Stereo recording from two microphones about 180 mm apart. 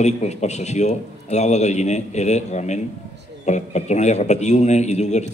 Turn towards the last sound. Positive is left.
turn(degrees=40)  # may be behind; listen again after turning